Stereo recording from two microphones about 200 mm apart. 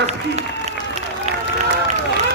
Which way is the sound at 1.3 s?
35° right (ahead or behind).